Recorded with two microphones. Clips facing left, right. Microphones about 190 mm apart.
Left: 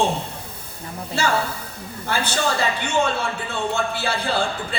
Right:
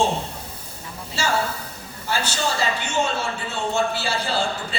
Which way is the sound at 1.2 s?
55° left (ahead or behind).